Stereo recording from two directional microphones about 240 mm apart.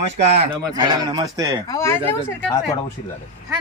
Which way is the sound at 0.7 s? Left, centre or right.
Centre.